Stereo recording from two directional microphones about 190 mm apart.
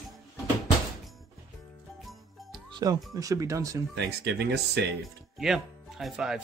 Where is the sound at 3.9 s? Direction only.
65° right (ahead or behind).